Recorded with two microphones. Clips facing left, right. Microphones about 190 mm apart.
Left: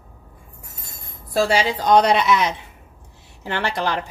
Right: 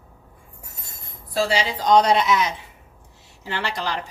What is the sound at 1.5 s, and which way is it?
A woman's voice, 60° left (ahead or behind).